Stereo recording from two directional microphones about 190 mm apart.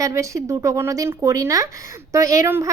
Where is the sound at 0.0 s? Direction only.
15° right (ahead or behind).